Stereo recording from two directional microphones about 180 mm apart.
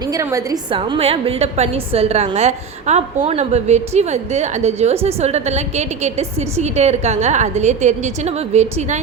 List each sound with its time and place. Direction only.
0.1 s a woman's voice: 15° right (ahead or behind); by 9.0 s 35° right (ahead or behind)